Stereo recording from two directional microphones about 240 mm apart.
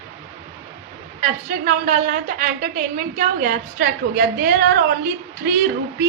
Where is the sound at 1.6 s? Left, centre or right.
Right.